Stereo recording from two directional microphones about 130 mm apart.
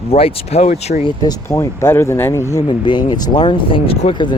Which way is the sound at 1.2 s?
30° left (ahead or behind).